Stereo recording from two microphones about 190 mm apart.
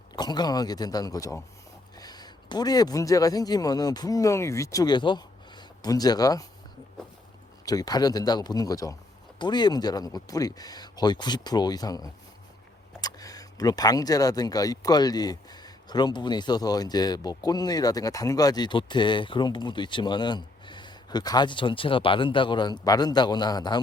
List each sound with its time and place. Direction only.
0.2 s speech: 20° left (ahead or behind)
7.6 s speech: 20° left (ahead or behind)